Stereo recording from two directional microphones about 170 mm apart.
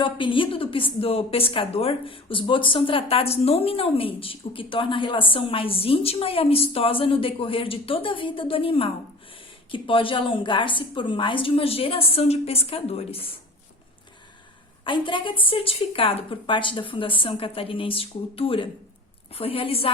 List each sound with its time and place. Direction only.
0.0 s a woman's voice: 30° left (ahead or behind)
14.8 s a woman's voice: 30° left (ahead or behind)